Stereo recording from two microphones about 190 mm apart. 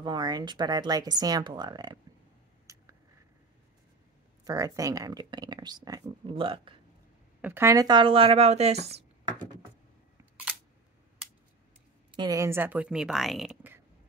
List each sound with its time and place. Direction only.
0.0 s speech: 20° right (ahead or behind)
2.6 s a sound: 15° right (ahead or behind)
4.5 s speech: 20° right (ahead or behind)
7.4 s speech: 15° right (ahead or behind); by 9.5 s 40° right (ahead or behind)
12.2 s speech: 15° right (ahead or behind); by 13.6 s centre (ahead or behind)